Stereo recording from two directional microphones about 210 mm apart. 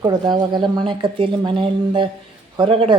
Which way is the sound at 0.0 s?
20° right (ahead or behind).